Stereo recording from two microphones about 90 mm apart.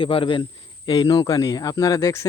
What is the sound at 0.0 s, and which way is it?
Speech, 70° left (ahead or behind).